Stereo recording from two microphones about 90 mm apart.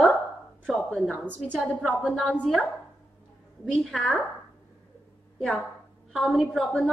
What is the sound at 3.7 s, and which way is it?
Speech, centre (ahead or behind).